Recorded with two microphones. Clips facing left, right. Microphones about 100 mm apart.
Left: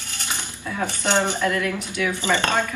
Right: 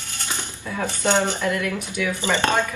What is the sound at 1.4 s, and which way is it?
Speech, 20° right (ahead or behind).